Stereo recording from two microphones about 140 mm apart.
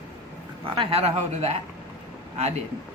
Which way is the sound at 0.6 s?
35° right (ahead or behind).